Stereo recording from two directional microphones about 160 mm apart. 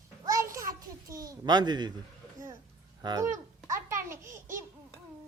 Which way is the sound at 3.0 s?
25° right (ahead or behind).